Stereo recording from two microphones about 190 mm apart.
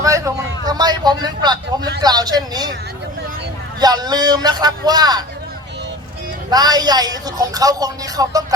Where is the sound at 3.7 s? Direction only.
20° right (ahead or behind).